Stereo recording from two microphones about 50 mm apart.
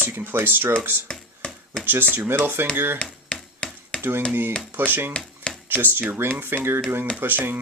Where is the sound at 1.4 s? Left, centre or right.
Left.